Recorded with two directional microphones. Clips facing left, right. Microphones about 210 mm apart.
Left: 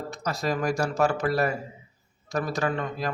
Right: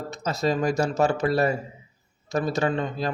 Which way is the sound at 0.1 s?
25° right (ahead or behind).